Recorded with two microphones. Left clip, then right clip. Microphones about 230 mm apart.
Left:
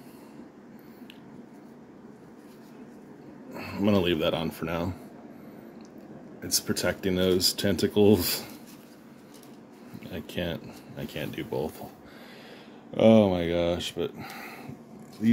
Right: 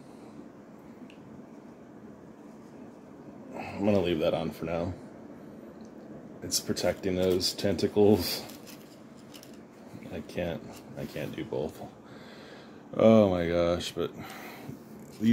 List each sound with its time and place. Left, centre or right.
3.5 s speech: left
6.4 s speech: left
10.1 s speech: left
12.9 s speech: centre